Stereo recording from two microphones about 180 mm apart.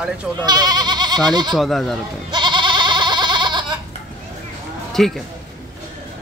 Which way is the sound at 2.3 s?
25° right (ahead or behind).